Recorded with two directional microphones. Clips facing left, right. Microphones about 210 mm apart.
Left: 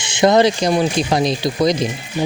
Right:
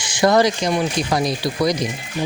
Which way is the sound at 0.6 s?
35° left (ahead or behind).